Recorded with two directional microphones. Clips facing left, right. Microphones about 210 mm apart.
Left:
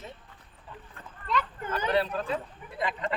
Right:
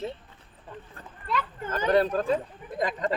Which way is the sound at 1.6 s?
45° right (ahead or behind).